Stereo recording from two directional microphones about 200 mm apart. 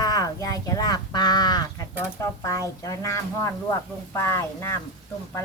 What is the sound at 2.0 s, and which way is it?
Speech, 15° left (ahead or behind).